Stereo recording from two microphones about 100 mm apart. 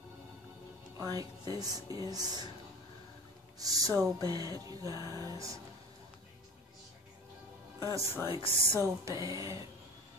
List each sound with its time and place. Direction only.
1.5 s music: 40° right (ahead or behind)
3.5 s music: 40° right (ahead or behind)
7.8 s music: 35° right (ahead or behind)
8.3 s speech: 65° left (ahead or behind)
8.7 s music: 30° right (ahead or behind)